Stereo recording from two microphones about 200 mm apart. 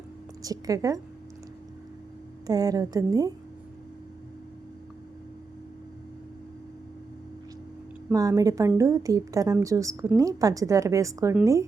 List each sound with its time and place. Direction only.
0.4 s a woman's voice: 15° right (ahead or behind)
2.5 s a woman's voice: 20° right (ahead or behind)
8.1 s a woman's voice: 15° right (ahead or behind)